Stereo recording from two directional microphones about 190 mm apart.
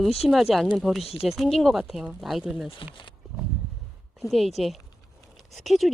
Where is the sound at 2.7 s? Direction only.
25° left (ahead or behind).